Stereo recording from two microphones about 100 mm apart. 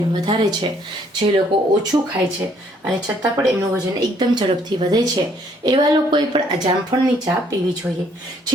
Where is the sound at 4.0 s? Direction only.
45° right (ahead or behind).